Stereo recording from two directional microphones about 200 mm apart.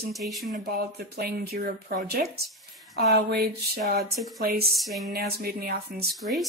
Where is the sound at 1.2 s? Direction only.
50° right (ahead or behind).